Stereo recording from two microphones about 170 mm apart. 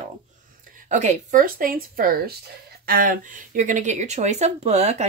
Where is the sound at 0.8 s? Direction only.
45° right (ahead or behind).